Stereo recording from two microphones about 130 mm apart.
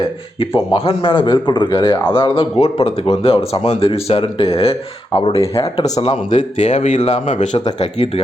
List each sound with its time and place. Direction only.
0.3 s a man's voice: 45° left (ahead or behind)
6.3 s speech: 65° left (ahead or behind)
7.8 s speech: 55° left (ahead or behind)